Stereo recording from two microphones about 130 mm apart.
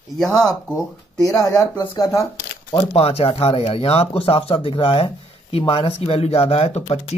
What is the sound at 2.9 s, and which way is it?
Speech, 50° left (ahead or behind).